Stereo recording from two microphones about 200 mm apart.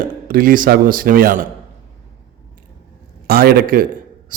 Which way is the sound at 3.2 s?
50° right (ahead or behind).